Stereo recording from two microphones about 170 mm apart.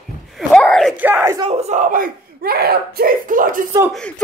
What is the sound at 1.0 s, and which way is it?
Speech, 10° right (ahead or behind).